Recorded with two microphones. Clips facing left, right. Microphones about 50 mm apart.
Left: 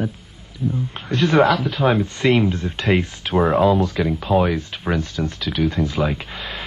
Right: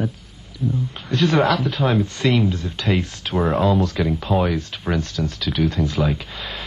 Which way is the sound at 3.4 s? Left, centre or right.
Centre.